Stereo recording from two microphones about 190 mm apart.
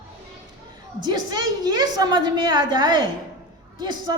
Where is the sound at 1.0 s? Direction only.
20° right (ahead or behind).